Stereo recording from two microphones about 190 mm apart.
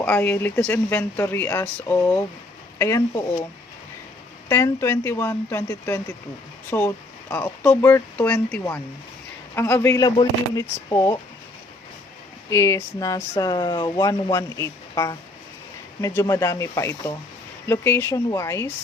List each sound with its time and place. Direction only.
0.0 s speech: 10° left (ahead or behind)
4.4 s speech: 15° left (ahead or behind)
12.5 s speech: 15° left (ahead or behind)